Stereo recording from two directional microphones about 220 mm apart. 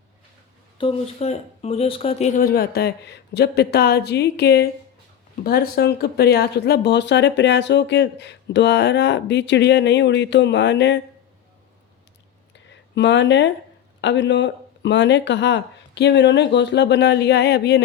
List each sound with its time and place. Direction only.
0.8 s speech: 25° left (ahead or behind); by 11.0 s 50° left (ahead or behind)
12.5 s a sound: 55° left (ahead or behind)
14.0 s speech: 55° left (ahead or behind)